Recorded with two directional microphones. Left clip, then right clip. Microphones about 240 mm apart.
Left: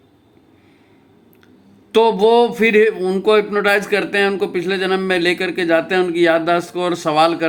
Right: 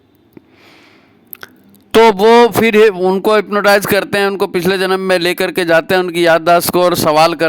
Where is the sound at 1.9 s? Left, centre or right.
Right.